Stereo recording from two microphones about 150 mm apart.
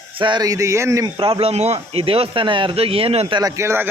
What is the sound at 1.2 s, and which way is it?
Speech, 40° right (ahead or behind).